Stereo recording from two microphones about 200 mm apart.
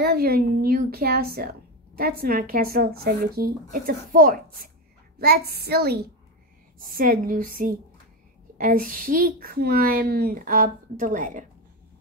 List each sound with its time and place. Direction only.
0.0 s a woman's voice: 50° right (ahead or behind)